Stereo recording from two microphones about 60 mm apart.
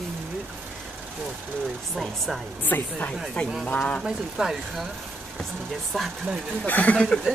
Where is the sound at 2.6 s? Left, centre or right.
Left.